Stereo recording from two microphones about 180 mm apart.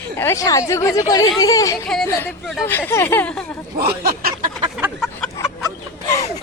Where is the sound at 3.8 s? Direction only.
60° right (ahead or behind).